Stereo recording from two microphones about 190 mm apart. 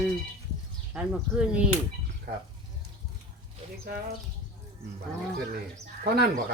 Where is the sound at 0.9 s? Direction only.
5° right (ahead or behind).